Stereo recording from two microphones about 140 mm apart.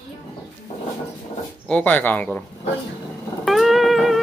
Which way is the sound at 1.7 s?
10° left (ahead or behind).